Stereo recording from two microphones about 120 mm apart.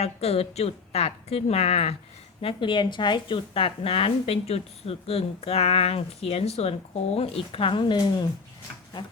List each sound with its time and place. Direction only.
0.0 s a woman's voice: 60° left (ahead or behind)
2.4 s a woman's voice: 45° left (ahead or behind)